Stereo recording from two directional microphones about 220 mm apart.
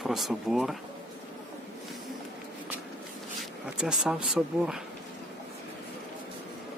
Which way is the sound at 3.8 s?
5° right (ahead or behind).